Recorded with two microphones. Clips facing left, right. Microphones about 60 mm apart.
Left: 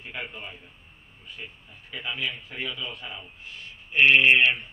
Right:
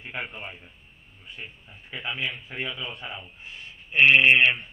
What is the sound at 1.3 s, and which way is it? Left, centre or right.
Speech, right.